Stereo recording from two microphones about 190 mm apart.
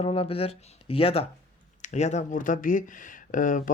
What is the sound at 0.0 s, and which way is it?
Speech, 30° left (ahead or behind).